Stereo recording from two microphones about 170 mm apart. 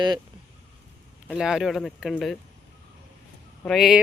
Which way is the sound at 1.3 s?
5° right (ahead or behind).